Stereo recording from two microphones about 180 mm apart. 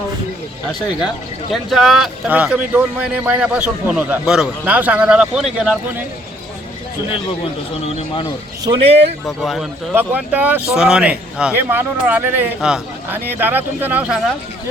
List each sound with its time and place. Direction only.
1.7 s a man's voice: centre (ahead or behind)
8.6 s speech: 30° right (ahead or behind)
9.2 s a man's voice: centre (ahead or behind)
9.9 s a man's voice: 10° right (ahead or behind)